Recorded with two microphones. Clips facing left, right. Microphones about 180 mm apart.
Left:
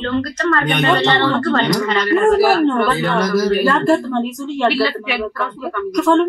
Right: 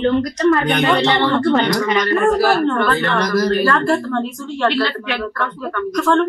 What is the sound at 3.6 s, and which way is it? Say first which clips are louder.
A woman's voice: left 2 dB; 20° left (ahead or behind).